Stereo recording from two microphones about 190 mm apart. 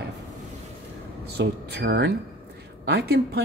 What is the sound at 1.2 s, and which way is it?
Speech, 60° right (ahead or behind).